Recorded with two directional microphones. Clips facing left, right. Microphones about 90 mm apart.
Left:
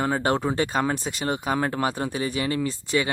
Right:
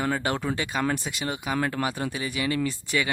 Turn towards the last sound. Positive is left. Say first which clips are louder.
# left 2 dB
turn(degrees=30)  # may be behind; listen again after turning